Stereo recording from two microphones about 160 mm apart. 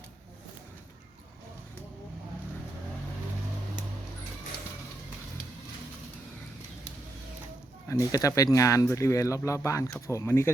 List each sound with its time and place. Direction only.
7.9 s speech: 20° left (ahead or behind)